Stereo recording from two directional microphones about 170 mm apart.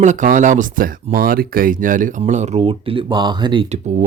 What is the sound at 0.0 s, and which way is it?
Speech, 45° right (ahead or behind).